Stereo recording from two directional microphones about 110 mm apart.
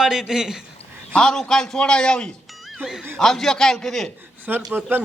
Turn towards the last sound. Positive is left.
turn(degrees=-20)  # may be behind; listen again after turning